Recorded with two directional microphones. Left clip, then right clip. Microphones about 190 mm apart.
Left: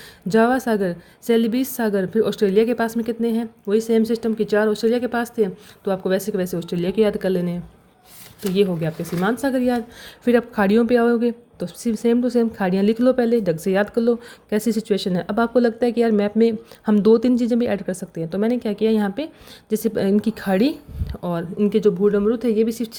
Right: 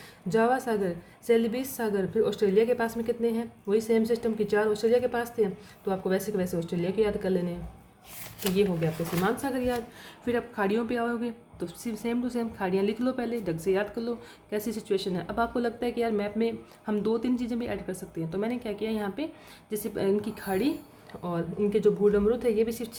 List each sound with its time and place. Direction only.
0.3 s a woman's voice: 40° left (ahead or behind)
8.5 s a woman's voice: 40° left (ahead or behind)